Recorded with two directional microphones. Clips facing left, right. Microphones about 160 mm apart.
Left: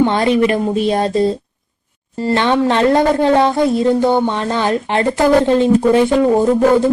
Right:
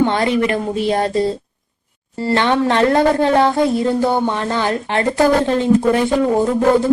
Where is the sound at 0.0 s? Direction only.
20° left (ahead or behind).